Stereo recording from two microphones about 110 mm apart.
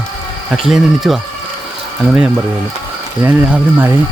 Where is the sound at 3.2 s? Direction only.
15° right (ahead or behind).